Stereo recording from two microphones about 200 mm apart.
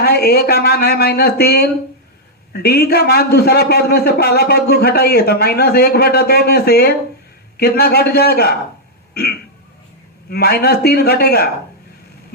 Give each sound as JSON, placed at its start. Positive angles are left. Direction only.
{"t": 0.0, "sound": "a man's voice", "side_deg": 55}